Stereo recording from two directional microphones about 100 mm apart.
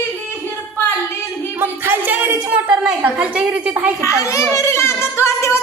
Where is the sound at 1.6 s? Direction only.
20° right (ahead or behind).